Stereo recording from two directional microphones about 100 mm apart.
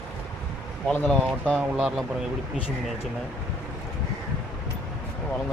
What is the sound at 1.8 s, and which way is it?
Speech, 5° right (ahead or behind).